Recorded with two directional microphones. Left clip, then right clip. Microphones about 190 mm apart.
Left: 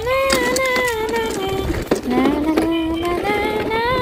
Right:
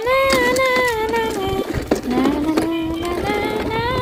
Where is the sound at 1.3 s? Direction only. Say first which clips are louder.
Even; 15° left (ahead or behind).